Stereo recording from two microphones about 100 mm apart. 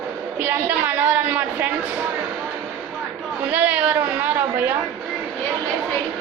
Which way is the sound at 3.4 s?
15° right (ahead or behind).